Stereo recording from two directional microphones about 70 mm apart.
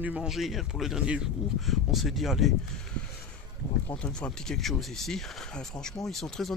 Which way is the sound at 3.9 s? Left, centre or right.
Centre.